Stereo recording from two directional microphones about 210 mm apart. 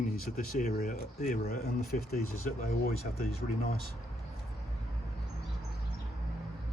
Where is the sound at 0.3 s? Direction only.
45° left (ahead or behind).